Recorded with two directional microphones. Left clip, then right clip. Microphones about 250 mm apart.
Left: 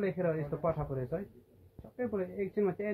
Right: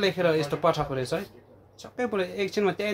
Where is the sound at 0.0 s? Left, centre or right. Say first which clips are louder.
Right 9 dB; centre.